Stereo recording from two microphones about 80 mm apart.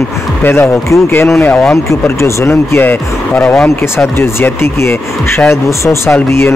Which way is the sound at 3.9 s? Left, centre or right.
Left.